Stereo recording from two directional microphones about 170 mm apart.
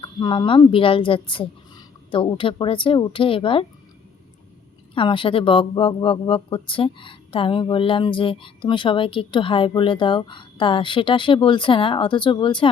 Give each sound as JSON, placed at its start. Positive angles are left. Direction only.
{"t": 0.0, "sound": "speech", "side_deg": 30}
{"t": 4.9, "sound": "speech", "side_deg": 30}